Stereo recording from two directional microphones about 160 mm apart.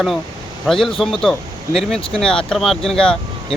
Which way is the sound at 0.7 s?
Centre (ahead or behind).